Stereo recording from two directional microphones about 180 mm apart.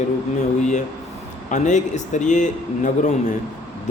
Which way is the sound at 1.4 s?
40° left (ahead or behind).